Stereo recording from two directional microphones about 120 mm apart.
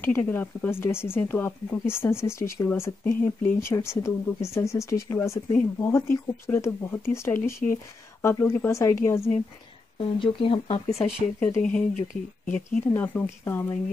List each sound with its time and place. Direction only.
0.0 s speech: 15° left (ahead or behind)
9.9 s speech: 50° left (ahead or behind)
11.3 s speech: 10° left (ahead or behind)